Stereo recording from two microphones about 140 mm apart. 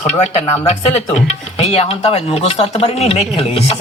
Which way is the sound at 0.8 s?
50° left (ahead or behind).